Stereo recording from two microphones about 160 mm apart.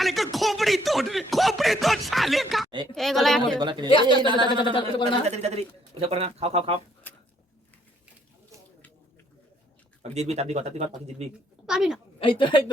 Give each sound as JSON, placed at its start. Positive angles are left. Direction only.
{"t": 0.0, "sound": "a sound", "side_deg": 0}
{"t": 0.3, "sound": "a woman's voice", "side_deg": 0}
{"t": 3.6, "sound": "speech", "side_deg": -25}
{"t": 4.7, "sound": "speech", "side_deg": 30}
{"t": 5.2, "sound": "speech", "side_deg": -40}
{"t": 10.0, "sound": "speech", "side_deg": -40}
{"t": 11.6, "sound": "speech", "side_deg": -5}
{"t": 12.2, "sound": "speech", "side_deg": 30}